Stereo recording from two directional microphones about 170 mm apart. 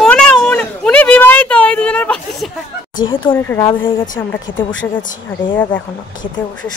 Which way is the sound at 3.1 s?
30° left (ahead or behind).